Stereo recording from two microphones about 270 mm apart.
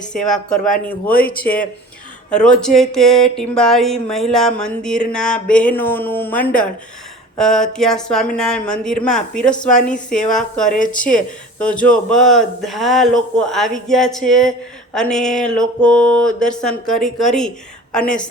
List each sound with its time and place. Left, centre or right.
0.1 s speech: centre
0.5 s speech: left
2.3 s speech: centre
9.9 s speech: left
10.3 s a woman's voice: centre